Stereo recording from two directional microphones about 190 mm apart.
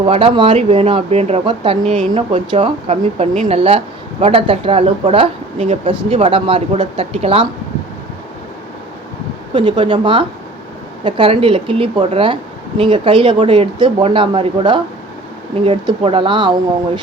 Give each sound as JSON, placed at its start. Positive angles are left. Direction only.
{"t": 0.0, "sound": "speech", "side_deg": -30}
{"t": 2.5, "sound": "speech", "side_deg": -25}
{"t": 9.6, "sound": "speech", "side_deg": -25}